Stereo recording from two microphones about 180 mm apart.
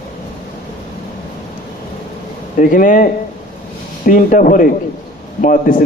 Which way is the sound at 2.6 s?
50° left (ahead or behind).